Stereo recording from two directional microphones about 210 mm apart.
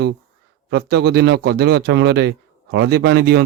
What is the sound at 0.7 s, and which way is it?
Speech, 50° right (ahead or behind).